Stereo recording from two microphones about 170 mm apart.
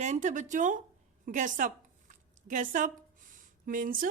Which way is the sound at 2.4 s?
50° right (ahead or behind).